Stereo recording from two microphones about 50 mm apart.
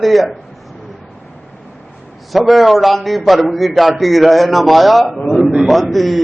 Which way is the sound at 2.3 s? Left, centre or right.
Centre.